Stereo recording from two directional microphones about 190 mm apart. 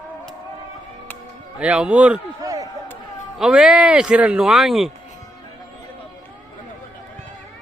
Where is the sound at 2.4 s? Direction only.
20° right (ahead or behind).